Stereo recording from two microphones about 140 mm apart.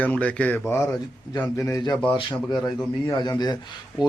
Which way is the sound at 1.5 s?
25° left (ahead or behind).